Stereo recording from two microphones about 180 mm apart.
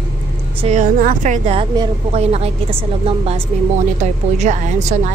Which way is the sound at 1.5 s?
35° right (ahead or behind).